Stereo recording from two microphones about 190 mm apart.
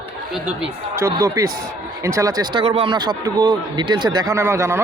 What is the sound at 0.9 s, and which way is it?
Speech, 15° right (ahead or behind).